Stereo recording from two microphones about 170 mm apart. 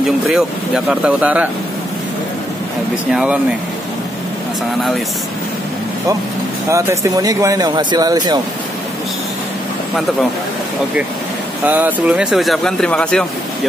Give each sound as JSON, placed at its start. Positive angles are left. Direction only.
{"t": 0.0, "sound": "speech", "side_deg": -5}
{"t": 3.1, "sound": "speech", "side_deg": -5}
{"t": 6.7, "sound": "speech", "side_deg": -20}
{"t": 11.6, "sound": "speech", "side_deg": -10}